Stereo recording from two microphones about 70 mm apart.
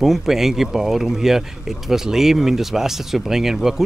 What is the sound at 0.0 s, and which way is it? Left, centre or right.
Speech, centre.